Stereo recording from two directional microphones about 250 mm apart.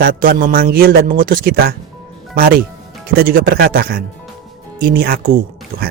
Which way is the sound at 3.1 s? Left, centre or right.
Right.